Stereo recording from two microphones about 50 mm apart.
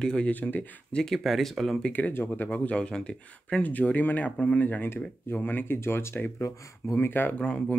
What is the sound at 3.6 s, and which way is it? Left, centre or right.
Speech, left.